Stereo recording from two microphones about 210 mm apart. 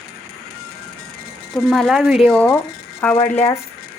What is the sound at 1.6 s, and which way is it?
Speech, centre (ahead or behind).